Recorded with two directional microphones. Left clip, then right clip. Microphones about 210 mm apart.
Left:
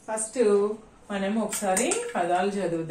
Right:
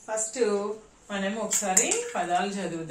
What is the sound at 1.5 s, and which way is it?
Speech, centre (ahead or behind).